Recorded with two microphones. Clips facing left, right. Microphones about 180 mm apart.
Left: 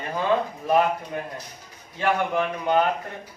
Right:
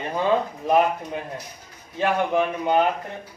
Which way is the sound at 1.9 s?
15° right (ahead or behind).